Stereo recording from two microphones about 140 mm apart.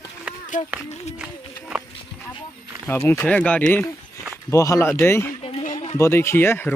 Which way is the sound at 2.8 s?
15° left (ahead or behind).